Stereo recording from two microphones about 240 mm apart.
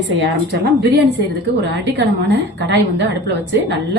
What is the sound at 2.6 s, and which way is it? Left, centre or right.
A woman's voice, right.